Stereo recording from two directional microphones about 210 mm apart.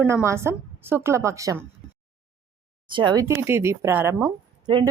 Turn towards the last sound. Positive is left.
turn(degrees=-20)  # may be behind; listen again after turning